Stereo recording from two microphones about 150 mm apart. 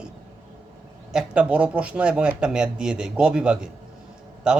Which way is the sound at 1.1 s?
5° right (ahead or behind).